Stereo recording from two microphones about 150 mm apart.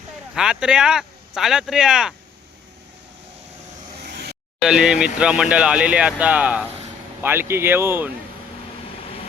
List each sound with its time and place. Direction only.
0.3 s speech: 5° right (ahead or behind)
4.0 s vehicle: 90° right
4.6 s speech: 5° right (ahead or behind)